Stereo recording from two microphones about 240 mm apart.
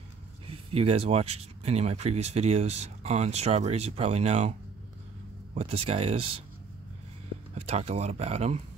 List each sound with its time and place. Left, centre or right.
0.5 s speech: right
7.5 s speech: right